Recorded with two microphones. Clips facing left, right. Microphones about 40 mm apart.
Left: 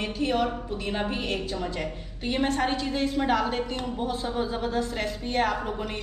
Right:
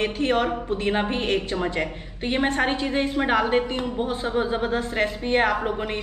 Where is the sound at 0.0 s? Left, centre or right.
Right.